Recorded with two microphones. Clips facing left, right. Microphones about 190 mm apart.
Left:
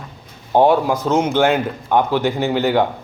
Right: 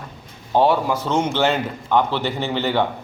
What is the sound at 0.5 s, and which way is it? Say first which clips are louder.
A man's voice: left 3 dB; 15° left (ahead or behind).